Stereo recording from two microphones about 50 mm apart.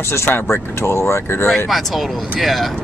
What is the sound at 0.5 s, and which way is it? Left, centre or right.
Speech, left.